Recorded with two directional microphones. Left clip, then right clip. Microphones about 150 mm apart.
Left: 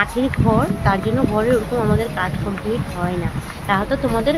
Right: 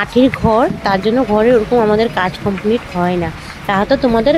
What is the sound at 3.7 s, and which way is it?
Speech, 50° right (ahead or behind).